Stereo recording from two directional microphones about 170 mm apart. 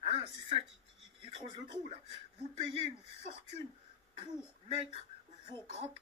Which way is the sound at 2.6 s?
35° right (ahead or behind).